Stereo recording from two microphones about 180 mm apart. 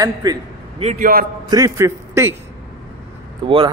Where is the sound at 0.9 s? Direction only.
55° right (ahead or behind).